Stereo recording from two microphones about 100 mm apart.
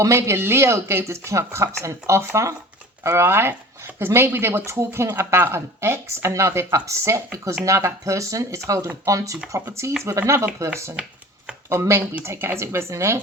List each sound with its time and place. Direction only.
0.0 s speech: 30° right (ahead or behind)